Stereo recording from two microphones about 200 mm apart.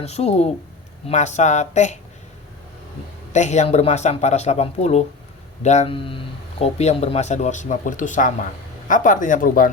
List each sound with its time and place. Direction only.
0.0 s speech: 30° left (ahead or behind)
3.3 s speech: 35° left (ahead or behind)